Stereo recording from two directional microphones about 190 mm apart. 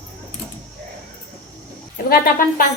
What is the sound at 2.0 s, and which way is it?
Speech, 45° left (ahead or behind).